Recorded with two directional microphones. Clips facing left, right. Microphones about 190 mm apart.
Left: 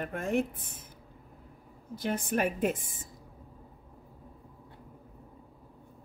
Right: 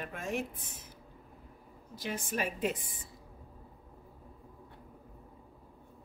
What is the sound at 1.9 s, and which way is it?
Speech, 55° left (ahead or behind).